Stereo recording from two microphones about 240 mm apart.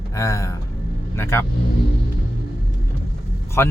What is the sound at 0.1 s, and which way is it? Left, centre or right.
Speech, centre.